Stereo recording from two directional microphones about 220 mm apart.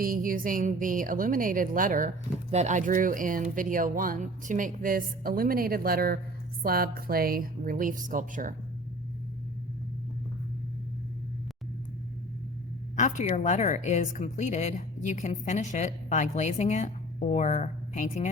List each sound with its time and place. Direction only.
0.0 s speech: 40° right (ahead or behind)
13.0 s speech: 35° left (ahead or behind)